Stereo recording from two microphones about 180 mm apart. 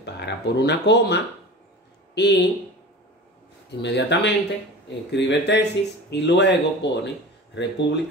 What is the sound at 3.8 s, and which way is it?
Speech, 70° left (ahead or behind).